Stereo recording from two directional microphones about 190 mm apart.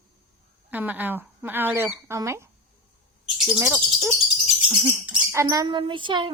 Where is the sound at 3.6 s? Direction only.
15° right (ahead or behind).